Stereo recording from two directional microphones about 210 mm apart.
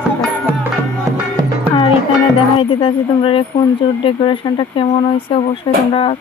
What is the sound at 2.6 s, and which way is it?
Speech, 25° left (ahead or behind).